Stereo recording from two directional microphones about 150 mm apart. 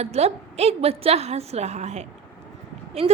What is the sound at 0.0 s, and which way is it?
A woman's voice, 45° right (ahead or behind).